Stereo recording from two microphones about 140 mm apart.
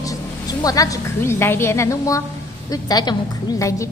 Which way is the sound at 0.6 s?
25° left (ahead or behind).